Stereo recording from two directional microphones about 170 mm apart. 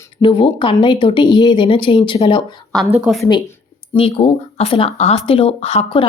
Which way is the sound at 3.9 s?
35° left (ahead or behind).